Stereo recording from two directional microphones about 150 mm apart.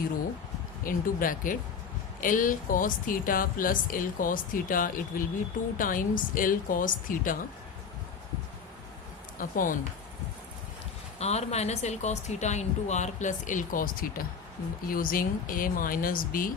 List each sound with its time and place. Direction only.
0.9 s a woman's voice: 65° left (ahead or behind)
9.4 s a woman's voice: 65° left (ahead or behind)
11.2 s a woman's voice: 45° left (ahead or behind); by 13.9 s 60° left (ahead or behind)
14.8 s speech: 70° left (ahead or behind)